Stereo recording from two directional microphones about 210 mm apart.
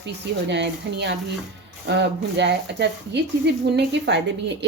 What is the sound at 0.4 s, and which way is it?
Speech, 55° right (ahead or behind).